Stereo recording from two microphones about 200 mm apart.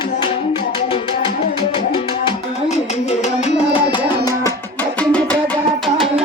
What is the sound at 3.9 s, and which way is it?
Music, 20° left (ahead or behind).